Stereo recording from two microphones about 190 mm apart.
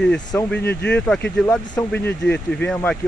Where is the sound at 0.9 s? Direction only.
5° left (ahead or behind).